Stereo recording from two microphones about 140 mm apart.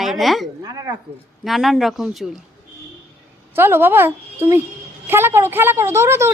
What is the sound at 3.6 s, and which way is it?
A woman's voice, 15° right (ahead or behind).